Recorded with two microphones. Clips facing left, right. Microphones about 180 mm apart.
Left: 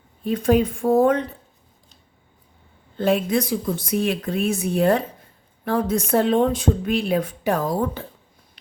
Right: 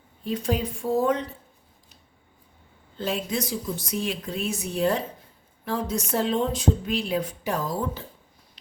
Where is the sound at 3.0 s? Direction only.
55° left (ahead or behind).